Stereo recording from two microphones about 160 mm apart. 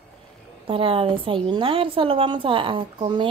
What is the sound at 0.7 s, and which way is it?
Speech, 35° right (ahead or behind).